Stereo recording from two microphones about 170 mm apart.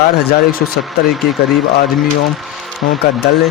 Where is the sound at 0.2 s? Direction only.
65° left (ahead or behind).